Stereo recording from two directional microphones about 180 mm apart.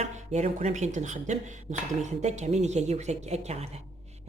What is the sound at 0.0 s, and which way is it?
A woman's voice, 40° right (ahead or behind).